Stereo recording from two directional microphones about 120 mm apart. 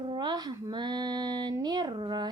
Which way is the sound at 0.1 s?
35° right (ahead or behind).